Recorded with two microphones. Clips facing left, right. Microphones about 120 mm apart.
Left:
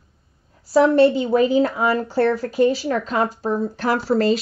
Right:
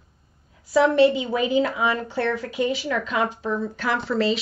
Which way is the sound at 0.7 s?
40° left (ahead or behind).